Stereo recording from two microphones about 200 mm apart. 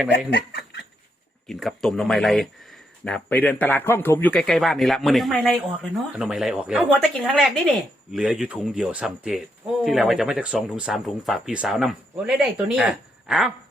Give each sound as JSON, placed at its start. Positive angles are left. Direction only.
{"t": 0.3, "sound": "speech", "side_deg": 60}
{"t": 1.5, "sound": "speech", "side_deg": 0}